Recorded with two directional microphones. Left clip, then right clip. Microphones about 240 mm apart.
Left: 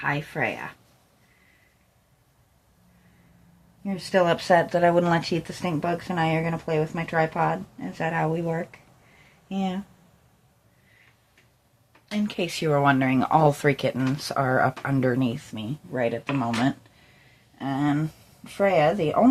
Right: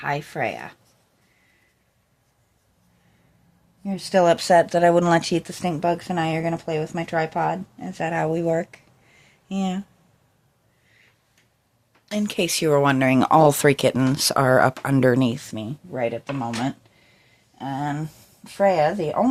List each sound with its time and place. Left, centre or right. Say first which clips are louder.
0.0 s speech: right 1 dB; right
3.8 s speech: right 4 dB; right
12.1 s speech: right 5 dB; right
15.9 s speech: even; right
17.6 s speech: left 1 dB; right